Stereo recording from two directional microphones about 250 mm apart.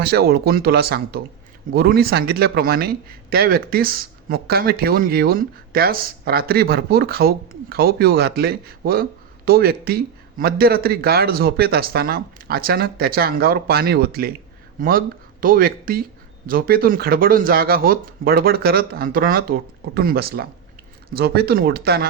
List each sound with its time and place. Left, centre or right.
0.0 s speech: right